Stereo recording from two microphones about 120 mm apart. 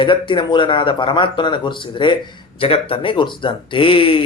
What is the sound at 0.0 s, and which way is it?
Speech, 45° left (ahead or behind).